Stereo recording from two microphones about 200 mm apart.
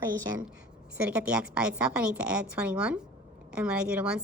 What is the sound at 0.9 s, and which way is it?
A woman's voice, 5° right (ahead or behind).